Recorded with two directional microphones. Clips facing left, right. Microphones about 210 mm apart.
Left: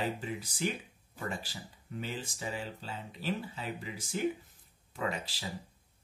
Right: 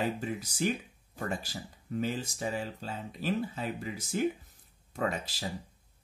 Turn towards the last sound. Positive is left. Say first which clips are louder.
# right 3 dB
turn(degrees=-45)  # may be behind; listen again after turning